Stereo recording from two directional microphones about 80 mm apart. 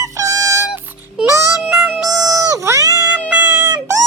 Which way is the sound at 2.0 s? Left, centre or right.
Right.